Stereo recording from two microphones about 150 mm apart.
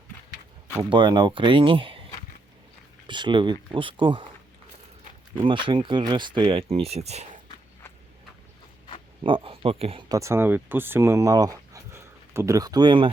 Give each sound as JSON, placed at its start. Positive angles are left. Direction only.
{"t": 0.9, "sound": "speech", "side_deg": -30}
{"t": 3.1, "sound": "speech", "side_deg": -30}
{"t": 5.5, "sound": "speech", "side_deg": -35}
{"t": 9.2, "sound": "speech", "side_deg": -35}
{"t": 10.1, "sound": "speech", "side_deg": -20}